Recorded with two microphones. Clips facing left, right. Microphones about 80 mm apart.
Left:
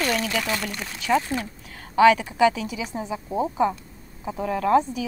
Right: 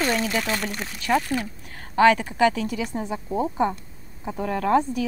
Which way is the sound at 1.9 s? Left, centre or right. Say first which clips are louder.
Left 1 dB; right.